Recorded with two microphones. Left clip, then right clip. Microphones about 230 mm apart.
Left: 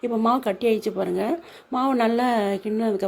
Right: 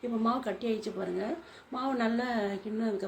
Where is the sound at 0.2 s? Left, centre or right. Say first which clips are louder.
Left 10 dB; left.